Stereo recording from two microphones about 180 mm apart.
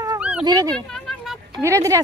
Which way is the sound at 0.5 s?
20° right (ahead or behind).